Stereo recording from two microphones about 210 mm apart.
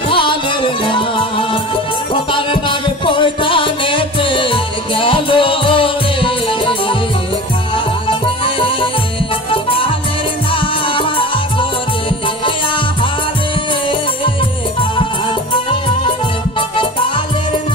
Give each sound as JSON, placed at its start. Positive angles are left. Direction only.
{"t": 0.1, "sound": "music", "side_deg": 25}
{"t": 9.5, "sound": "music", "side_deg": 25}